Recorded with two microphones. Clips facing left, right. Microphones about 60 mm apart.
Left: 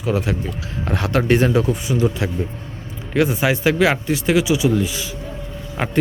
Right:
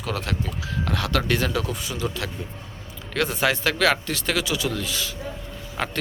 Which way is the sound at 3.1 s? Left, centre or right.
Centre.